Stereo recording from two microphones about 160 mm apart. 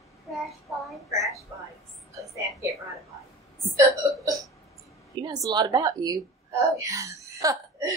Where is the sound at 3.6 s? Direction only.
20° right (ahead or behind).